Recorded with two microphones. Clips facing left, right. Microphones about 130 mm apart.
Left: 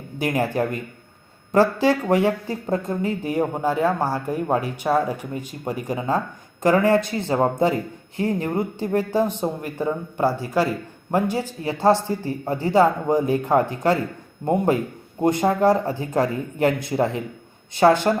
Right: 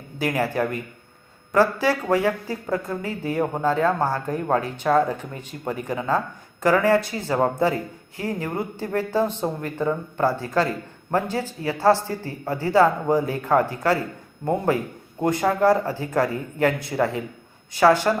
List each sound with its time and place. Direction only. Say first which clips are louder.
0.2 s a man's voice: left 1 dB; 20° left (ahead or behind)